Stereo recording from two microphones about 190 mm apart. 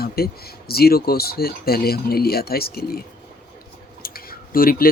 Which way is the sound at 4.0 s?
50° left (ahead or behind).